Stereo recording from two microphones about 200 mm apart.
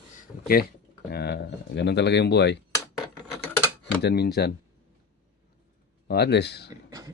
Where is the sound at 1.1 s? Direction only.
55° left (ahead or behind).